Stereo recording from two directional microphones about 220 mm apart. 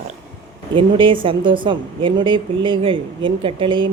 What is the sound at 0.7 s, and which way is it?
A woman's voice, 25° right (ahead or behind).